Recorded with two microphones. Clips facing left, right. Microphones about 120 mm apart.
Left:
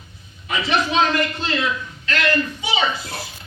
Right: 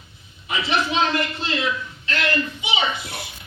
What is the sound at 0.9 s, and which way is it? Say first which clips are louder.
A man's voice: left 3 dB; 25° right (ahead or behind).